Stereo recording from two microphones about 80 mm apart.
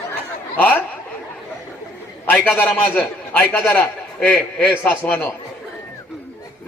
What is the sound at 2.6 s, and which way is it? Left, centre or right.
Speech, left.